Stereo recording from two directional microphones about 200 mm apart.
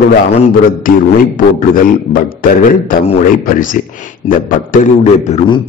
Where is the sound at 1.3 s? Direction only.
45° left (ahead or behind).